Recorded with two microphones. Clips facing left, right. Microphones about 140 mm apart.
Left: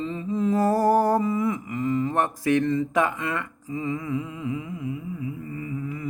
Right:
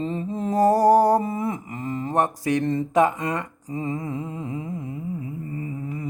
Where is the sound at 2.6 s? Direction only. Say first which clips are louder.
Right 3 dB; 45° right (ahead or behind).